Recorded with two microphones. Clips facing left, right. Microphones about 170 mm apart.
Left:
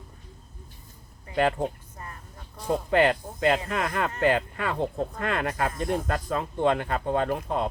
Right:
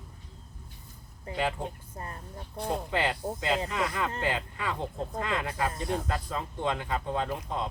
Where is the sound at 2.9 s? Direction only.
60° left (ahead or behind).